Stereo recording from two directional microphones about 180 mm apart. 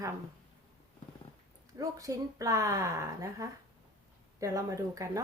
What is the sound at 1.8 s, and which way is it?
Speech, 20° right (ahead or behind).